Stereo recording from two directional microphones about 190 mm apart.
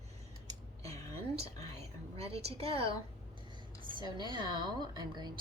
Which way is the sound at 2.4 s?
30° right (ahead or behind).